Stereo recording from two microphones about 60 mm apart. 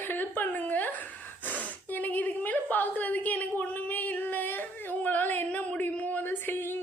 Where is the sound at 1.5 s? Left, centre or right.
Left.